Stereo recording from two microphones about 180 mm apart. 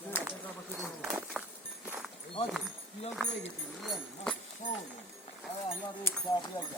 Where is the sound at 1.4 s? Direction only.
5° right (ahead or behind).